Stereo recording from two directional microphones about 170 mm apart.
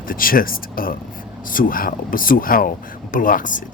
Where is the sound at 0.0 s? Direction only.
55° left (ahead or behind).